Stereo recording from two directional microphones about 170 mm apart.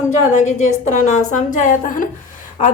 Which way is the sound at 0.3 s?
45° left (ahead or behind).